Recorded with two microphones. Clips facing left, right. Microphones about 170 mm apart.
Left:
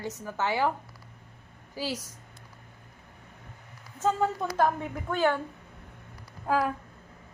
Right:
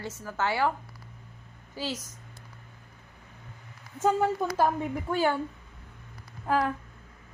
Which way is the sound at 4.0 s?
10° right (ahead or behind).